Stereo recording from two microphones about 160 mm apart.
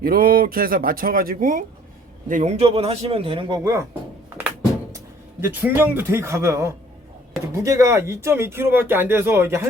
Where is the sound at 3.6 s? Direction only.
20° right (ahead or behind).